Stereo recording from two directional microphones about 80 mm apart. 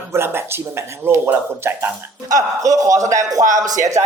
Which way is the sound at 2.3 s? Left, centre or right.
Right.